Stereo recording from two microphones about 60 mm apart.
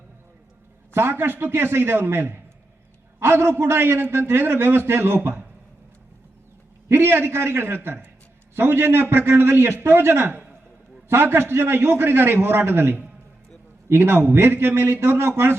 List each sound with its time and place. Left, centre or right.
0.9 s a man's voice: right
6.8 s a man's voice: right